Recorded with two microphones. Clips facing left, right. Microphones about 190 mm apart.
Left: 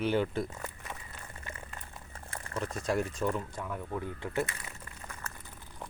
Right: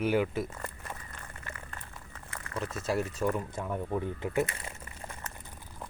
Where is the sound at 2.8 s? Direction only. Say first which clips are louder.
Even; 5° right (ahead or behind).